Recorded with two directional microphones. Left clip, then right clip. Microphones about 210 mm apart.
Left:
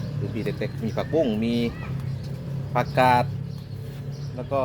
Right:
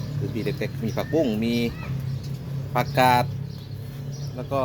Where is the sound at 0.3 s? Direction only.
15° right (ahead or behind).